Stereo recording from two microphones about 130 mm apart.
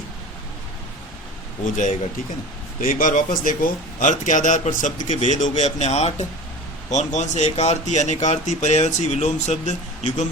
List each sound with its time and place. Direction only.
1.7 s a man's voice: 75° left (ahead or behind)
2.8 s a man's voice: 90° left; by 10.2 s 60° left (ahead or behind)